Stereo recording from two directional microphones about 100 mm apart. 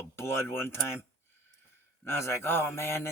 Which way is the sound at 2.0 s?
25° left (ahead or behind).